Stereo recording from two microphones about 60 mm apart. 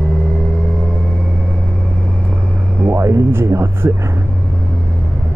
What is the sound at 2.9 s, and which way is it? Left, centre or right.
Speech, right.